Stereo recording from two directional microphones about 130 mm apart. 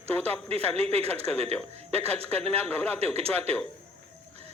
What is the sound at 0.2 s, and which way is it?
Speech, 50° right (ahead or behind).